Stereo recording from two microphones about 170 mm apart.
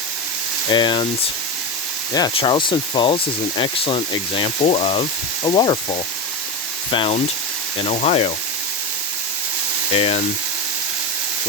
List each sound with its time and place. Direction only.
0.7 s speech: 25° left (ahead or behind)
2.1 s speech: 25° left (ahead or behind)
6.9 s speech: 30° left (ahead or behind)
9.9 s speech: 35° left (ahead or behind)